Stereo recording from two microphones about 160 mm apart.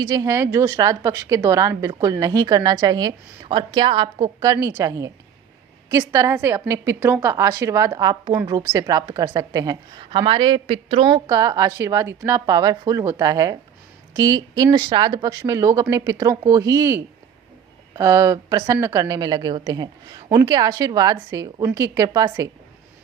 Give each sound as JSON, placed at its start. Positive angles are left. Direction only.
{"t": 0.0, "sound": "a woman's voice", "side_deg": -25}